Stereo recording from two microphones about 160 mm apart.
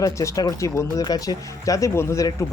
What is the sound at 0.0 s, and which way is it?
Speech, 20° left (ahead or behind).